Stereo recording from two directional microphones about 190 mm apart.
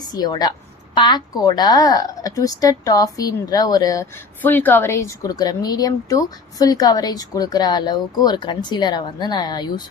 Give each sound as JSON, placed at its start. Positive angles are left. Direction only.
{"t": 0.0, "sound": "a woman's voice", "side_deg": 20}